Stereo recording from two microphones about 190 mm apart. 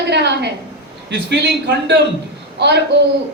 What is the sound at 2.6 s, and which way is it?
Speech, 65° right (ahead or behind).